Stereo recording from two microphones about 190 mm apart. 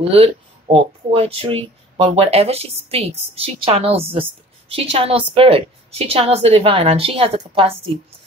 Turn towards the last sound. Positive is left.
turn(degrees=-30)  # may be behind; listen again after turning